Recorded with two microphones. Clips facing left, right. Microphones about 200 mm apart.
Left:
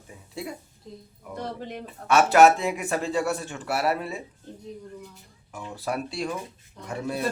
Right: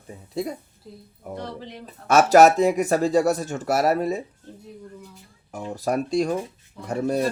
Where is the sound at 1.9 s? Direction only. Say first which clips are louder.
Right 5 dB; 40° right (ahead or behind).